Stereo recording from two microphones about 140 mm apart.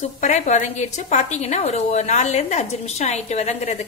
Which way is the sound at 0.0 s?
60° left (ahead or behind).